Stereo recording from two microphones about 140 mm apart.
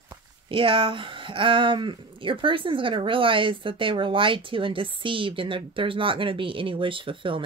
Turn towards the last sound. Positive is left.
turn(degrees=-40)  # may be behind; listen again after turning